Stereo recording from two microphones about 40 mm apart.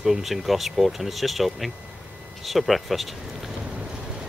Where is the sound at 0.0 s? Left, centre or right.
Centre.